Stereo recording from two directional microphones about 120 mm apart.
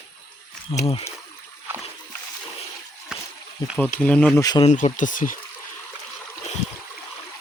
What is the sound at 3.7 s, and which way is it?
Speech, 10° left (ahead or behind).